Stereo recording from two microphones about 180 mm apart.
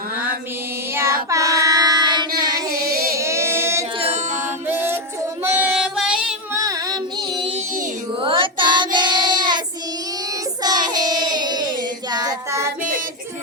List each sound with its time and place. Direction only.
1.3 s child singing: 20° right (ahead or behind)
2.6 s child singing: 55° right (ahead or behind)
3.1 s child singing: 15° right (ahead or behind)
3.9 s music: 35° right (ahead or behind)
4.7 s music: 10° right (ahead or behind)
5.4 s female singing: 10° right (ahead or behind)
6.5 s child singing: 20° right (ahead or behind)
10.6 s child singing: 20° right (ahead or behind)